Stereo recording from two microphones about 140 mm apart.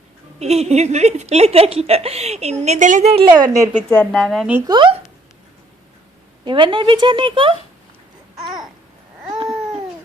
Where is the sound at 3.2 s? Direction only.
30° right (ahead or behind).